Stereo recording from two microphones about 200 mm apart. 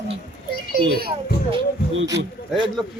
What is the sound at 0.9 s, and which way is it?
Speech, 50° right (ahead or behind).